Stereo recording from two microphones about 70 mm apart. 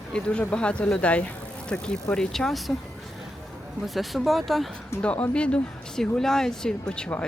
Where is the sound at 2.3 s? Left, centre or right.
Centre.